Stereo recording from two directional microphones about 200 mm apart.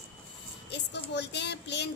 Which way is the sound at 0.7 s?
60° left (ahead or behind).